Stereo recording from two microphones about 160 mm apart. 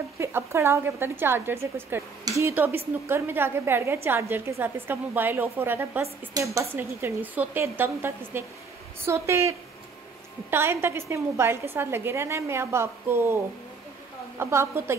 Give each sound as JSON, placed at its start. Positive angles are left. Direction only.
{"t": 0.2, "sound": "a woman's voice", "side_deg": -15}
{"t": 14.4, "sound": "a woman's voice", "side_deg": -15}